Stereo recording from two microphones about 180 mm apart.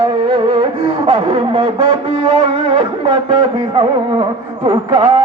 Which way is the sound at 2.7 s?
25° right (ahead or behind).